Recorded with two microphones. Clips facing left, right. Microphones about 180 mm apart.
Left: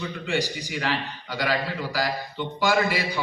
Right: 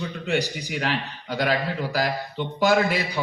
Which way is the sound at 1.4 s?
50° right (ahead or behind).